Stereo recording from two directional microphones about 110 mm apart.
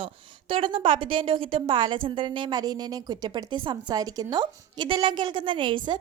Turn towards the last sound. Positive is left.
turn(degrees=-45)  # may be behind; listen again after turning